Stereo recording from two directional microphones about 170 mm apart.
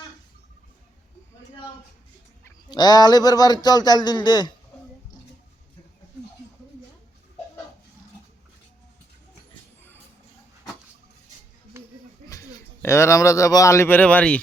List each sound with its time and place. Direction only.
2.6 s speech: 25° left (ahead or behind)
11.8 s a sound: 15° right (ahead or behind)
12.8 s a man's voice: 15° left (ahead or behind)